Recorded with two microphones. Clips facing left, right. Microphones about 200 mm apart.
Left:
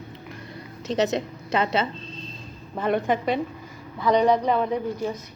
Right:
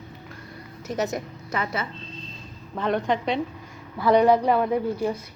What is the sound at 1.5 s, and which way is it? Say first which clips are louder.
Speech: left 6 dB; 20° left (ahead or behind).